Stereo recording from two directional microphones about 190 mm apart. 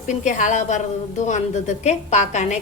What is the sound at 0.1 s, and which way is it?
A woman's voice, 40° left (ahead or behind).